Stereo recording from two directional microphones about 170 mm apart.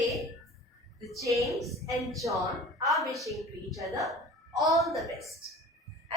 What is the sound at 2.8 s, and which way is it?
Speech, centre (ahead or behind).